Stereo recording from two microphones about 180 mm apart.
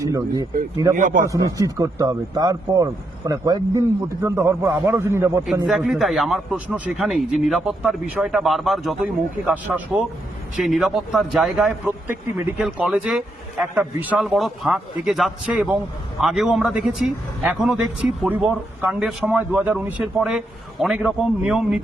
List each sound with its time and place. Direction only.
0.0 s speech: 20° right (ahead or behind)
0.9 s a man's voice: 45° right (ahead or behind)
1.2 s speech: 20° right (ahead or behind)
5.5 s a man's voice: centre (ahead or behind)